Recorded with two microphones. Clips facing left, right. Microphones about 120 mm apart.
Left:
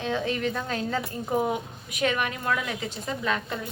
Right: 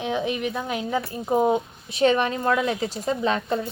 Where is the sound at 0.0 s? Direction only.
15° right (ahead or behind); by 3.6 s 30° right (ahead or behind).